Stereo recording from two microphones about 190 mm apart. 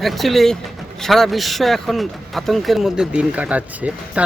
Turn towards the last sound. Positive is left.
turn(degrees=-5)  # may be behind; listen again after turning